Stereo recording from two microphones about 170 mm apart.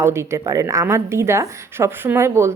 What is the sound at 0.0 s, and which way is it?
A woman's voice, 15° right (ahead or behind).